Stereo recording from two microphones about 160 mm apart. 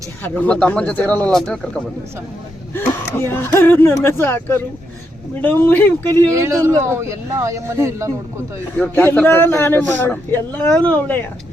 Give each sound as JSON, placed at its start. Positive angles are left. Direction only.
{"t": 0.2, "sound": "a man's voice", "side_deg": 10}
{"t": 2.7, "sound": "a man's voice", "side_deg": 15}
{"t": 6.3, "sound": "speech", "side_deg": -15}
{"t": 8.8, "sound": "a man's voice", "side_deg": 10}